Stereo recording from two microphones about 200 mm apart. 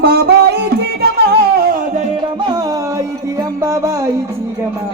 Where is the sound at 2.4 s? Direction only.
20° right (ahead or behind).